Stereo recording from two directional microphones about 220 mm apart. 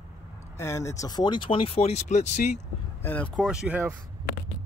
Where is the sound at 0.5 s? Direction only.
10° left (ahead or behind); by 2.5 s 30° left (ahead or behind).